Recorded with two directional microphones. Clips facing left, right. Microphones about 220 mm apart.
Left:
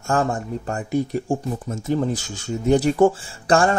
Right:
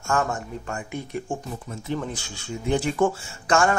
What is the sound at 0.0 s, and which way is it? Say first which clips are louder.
Speech: left 4 dB; 35° left (ahead or behind).